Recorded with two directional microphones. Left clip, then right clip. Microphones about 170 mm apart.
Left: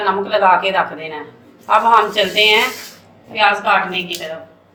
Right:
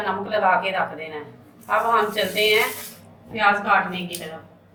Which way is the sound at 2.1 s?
35° left (ahead or behind).